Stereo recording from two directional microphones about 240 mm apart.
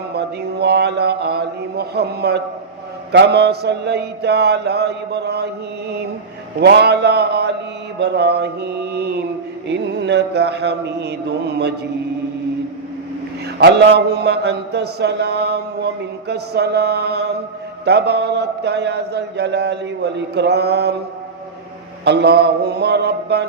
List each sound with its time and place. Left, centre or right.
0.1 s mantra: right
6.6 s mantra: right
13.6 s mantra: right
22.0 s mantra: right